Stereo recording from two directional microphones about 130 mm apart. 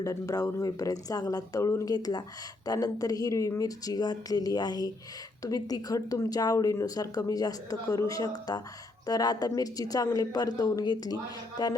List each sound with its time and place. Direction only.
0.0 s speech: 25° left (ahead or behind)